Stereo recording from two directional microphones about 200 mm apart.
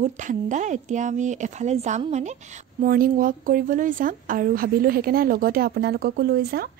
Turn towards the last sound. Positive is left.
turn(degrees=-50)  # may be behind; listen again after turning